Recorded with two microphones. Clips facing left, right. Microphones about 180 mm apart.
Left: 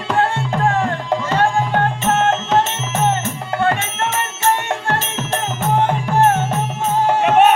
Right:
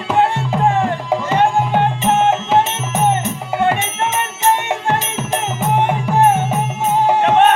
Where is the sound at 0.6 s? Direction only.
15° right (ahead or behind).